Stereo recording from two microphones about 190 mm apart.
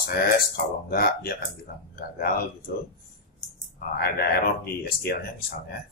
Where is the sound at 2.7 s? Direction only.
55° left (ahead or behind).